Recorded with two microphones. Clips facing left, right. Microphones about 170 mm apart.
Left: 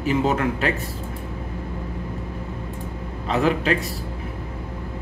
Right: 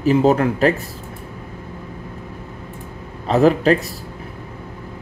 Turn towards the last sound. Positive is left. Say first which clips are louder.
# right 7 dB
turn(degrees=-40)  # may be behind; listen again after turning